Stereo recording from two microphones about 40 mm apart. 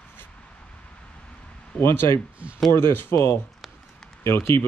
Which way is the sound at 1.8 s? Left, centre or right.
Left.